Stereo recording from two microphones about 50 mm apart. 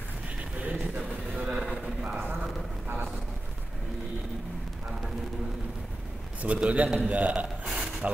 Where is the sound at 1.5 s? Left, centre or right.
Centre.